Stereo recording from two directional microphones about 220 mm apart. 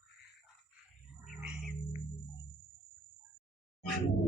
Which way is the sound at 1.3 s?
Centre (ahead or behind).